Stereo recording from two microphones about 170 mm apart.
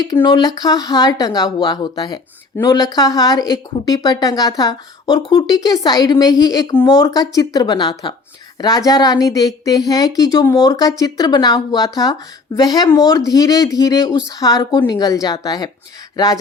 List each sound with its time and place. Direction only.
0.0 s speech: 25° left (ahead or behind)